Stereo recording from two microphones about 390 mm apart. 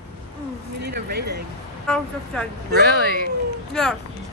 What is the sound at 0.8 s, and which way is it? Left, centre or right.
Speech, right.